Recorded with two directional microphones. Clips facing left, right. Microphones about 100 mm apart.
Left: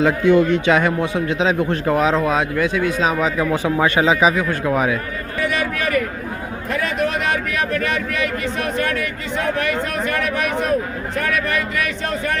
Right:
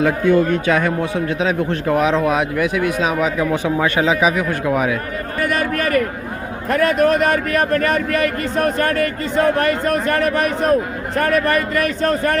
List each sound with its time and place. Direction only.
0.3 s speech: 45° right (ahead or behind)
0.7 s speech: 15° left (ahead or behind)
1.9 s speech: 10° right (ahead or behind)
3.0 s speech: 5° right (ahead or behind)
3.6 s speech: 5° left (ahead or behind)
4.2 s speech: 5° right (ahead or behind)
5.4 s speech: 50° right (ahead or behind)